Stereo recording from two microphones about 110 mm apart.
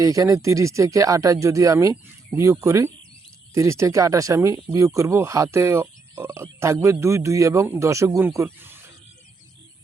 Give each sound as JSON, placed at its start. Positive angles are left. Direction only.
{"t": 0.0, "sound": "speech", "side_deg": -30}